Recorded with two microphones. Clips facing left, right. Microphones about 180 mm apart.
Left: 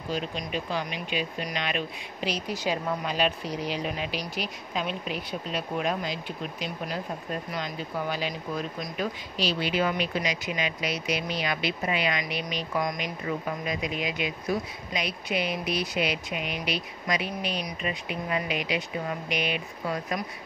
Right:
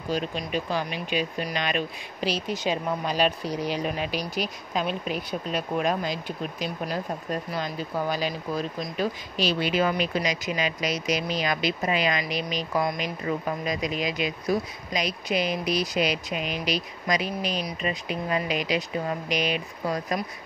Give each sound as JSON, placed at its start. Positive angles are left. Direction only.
{"t": 0.7, "sound": "speech", "side_deg": -40}
{"t": 2.2, "sound": "speech", "side_deg": -25}
{"t": 3.1, "sound": "speech", "side_deg": -40}
{"t": 7.5, "sound": "speech", "side_deg": -40}
{"t": 9.4, "sound": "speech", "side_deg": -50}